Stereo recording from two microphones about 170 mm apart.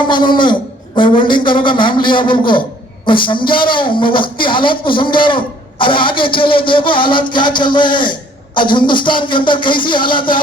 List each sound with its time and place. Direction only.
0.1 s a man's voice: 30° left (ahead or behind)